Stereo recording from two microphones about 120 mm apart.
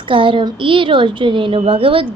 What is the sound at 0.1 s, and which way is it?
A woman's voice, 45° right (ahead or behind).